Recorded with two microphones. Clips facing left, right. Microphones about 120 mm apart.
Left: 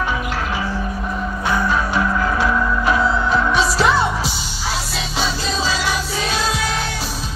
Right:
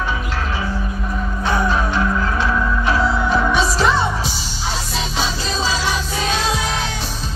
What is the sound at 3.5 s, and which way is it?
Music, centre (ahead or behind).